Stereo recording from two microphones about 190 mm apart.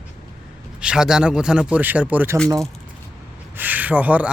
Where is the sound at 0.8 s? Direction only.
5° right (ahead or behind).